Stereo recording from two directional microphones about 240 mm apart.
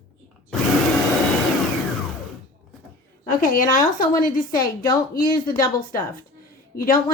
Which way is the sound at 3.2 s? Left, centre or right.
Left.